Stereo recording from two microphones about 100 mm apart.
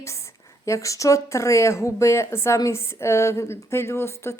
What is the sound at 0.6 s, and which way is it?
A woman's voice, 30° left (ahead or behind).